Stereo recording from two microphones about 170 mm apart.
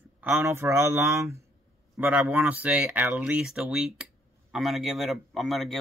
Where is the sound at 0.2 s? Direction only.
15° right (ahead or behind).